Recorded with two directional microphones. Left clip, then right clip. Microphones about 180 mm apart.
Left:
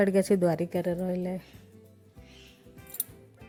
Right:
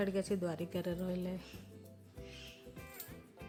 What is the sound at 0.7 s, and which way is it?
Speech, 20° left (ahead or behind).